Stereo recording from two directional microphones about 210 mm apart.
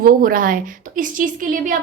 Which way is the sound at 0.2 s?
40° right (ahead or behind).